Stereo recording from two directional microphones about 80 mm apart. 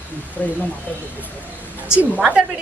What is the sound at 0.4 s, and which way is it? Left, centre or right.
Speech, left.